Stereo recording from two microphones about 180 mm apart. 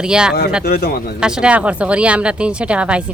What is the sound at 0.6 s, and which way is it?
Speech, 60° left (ahead or behind).